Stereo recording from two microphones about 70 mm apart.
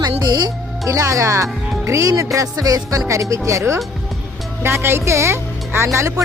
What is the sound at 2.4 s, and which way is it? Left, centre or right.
Speech, right.